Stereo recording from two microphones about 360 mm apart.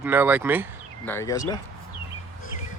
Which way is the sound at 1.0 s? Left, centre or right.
Centre.